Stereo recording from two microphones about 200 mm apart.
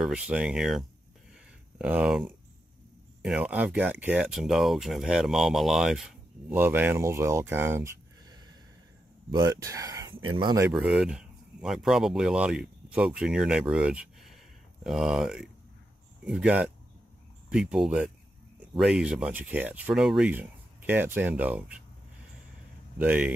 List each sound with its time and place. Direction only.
0.0 s speech: 5° right (ahead or behind); by 10.7 s 20° right (ahead or behind)
10.7 s speech: 5° right (ahead or behind)
22.9 s speech: 5° right (ahead or behind)